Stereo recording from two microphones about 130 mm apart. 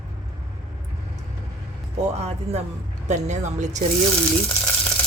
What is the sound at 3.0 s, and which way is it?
Speech, 60° right (ahead or behind).